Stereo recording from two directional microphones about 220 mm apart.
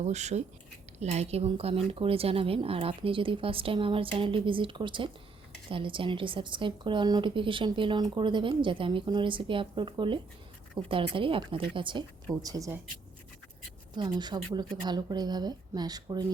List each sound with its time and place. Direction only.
0.0 s speech: 30° right (ahead or behind); by 12.8 s 15° right (ahead or behind)
13.9 s speech: 20° right (ahead or behind)